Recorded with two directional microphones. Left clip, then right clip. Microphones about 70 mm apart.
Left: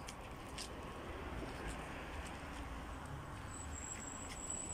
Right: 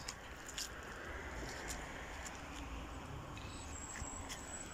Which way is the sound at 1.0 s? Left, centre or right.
Left.